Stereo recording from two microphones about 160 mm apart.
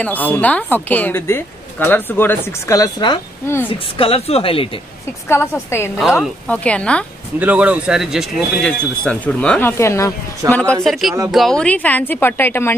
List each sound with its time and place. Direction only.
0.0 s speech: 10° left (ahead or behind); by 4.6 s 35° left (ahead or behind)
5.3 s speech: 15° left (ahead or behind)
5.9 s speech: centre (ahead or behind)
7.3 s speech: 10° right (ahead or behind); by 10.1 s 15° left (ahead or behind)
10.4 s speech: 20° right (ahead or behind)
10.8 s speech: centre (ahead or behind)